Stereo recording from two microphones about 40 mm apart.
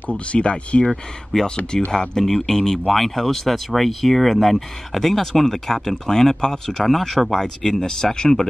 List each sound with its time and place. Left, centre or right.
0.1 s speech: left
0.8 s speech: centre
7.8 s speech: centre